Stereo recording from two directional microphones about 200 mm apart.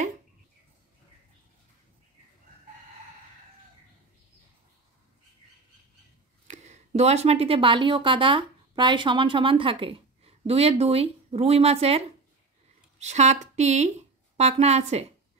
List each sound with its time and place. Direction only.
6.4 s speech: 35° right (ahead or behind)
13.0 s a woman's voice: 35° right (ahead or behind)